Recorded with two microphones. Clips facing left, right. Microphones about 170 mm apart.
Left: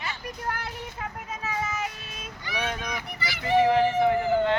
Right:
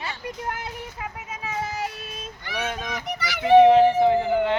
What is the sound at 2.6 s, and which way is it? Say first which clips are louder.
Speech: right 2 dB; 20° right (ahead or behind).